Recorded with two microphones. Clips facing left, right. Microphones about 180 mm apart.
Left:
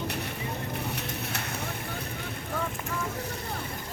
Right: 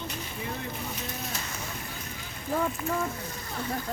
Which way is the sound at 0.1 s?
65° left (ahead or behind).